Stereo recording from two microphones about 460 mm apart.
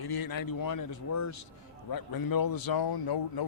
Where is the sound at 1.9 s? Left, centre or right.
Left.